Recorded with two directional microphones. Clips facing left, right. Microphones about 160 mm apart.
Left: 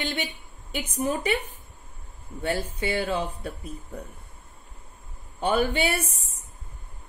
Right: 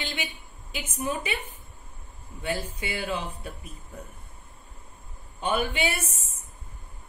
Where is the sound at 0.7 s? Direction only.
35° left (ahead or behind).